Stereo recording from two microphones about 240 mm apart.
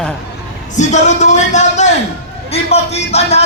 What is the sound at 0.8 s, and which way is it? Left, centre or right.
Speech, left.